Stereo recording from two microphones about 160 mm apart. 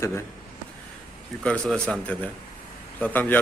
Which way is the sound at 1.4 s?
5° left (ahead or behind).